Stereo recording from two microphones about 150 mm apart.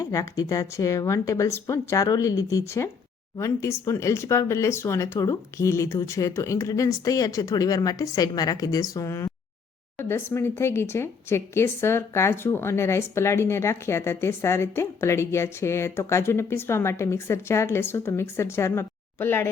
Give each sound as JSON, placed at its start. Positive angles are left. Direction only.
{"t": 0.0, "sound": "speech", "side_deg": 20}